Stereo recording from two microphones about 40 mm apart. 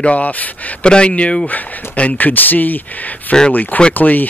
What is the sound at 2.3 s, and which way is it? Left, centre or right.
Speech, left.